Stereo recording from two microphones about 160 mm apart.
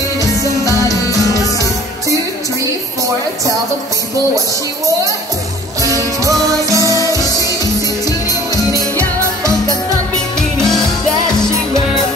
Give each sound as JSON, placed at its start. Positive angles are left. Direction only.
{"t": 0.4, "sound": "music", "side_deg": 20}
{"t": 5.8, "sound": "music", "side_deg": -20}
{"t": 8.1, "sound": "music", "side_deg": 25}
{"t": 10.6, "sound": "music", "side_deg": 5}